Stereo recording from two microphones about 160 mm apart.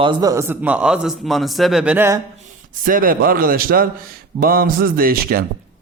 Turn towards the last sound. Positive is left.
turn(degrees=-65)  # may be behind; listen again after turning